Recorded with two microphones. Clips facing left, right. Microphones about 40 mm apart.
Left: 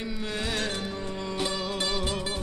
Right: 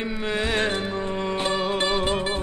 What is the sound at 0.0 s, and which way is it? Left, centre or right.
Music, right.